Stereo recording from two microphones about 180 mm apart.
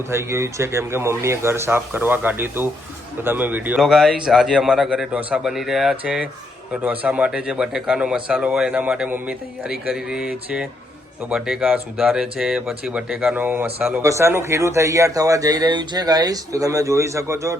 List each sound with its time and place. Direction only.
0.1 s speech: 15° right (ahead or behind)